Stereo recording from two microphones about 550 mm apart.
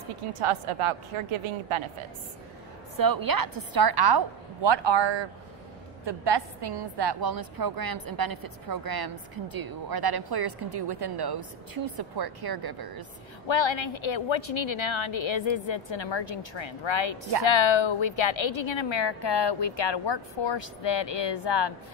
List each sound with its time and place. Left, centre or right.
0.4 s a woman's voice: right
3.0 s a woman's voice: right
13.5 s a woman's voice: left